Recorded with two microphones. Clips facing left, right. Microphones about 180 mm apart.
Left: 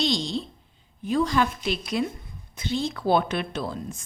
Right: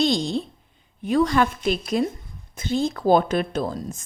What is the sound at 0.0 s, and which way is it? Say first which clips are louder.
Speech: right 4 dB; 50° right (ahead or behind).